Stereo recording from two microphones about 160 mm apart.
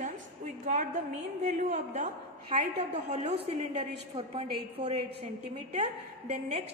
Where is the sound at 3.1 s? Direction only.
45° right (ahead or behind).